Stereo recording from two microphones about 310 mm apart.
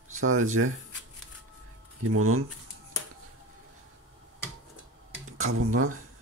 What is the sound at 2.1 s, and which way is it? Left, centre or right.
Speech, right.